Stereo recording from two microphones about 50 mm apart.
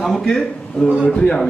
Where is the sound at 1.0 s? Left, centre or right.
Left.